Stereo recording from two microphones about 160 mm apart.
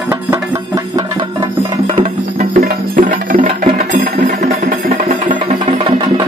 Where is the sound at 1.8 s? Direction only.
35° right (ahead or behind).